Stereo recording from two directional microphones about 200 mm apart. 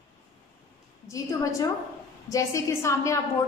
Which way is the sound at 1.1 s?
15° left (ahead or behind).